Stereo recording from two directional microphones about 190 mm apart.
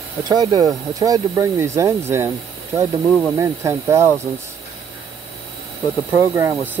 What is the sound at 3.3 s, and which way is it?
Speech, 15° right (ahead or behind).